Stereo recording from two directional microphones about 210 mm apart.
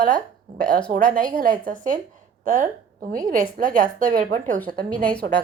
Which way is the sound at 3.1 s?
40° right (ahead or behind).